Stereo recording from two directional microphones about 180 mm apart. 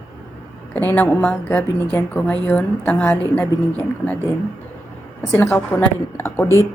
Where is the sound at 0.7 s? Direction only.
10° left (ahead or behind).